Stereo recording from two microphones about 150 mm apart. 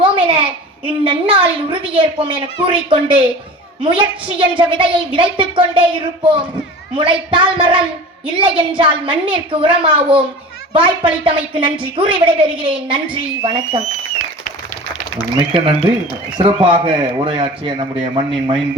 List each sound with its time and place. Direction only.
0.0 s a sound: 35° right (ahead or behind)
0.9 s a woman's voice: 35° right (ahead or behind)
15.5 s a woman's voice: 35° right (ahead or behind)